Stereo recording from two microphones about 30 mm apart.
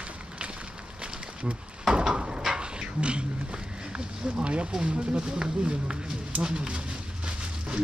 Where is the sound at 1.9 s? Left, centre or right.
Right.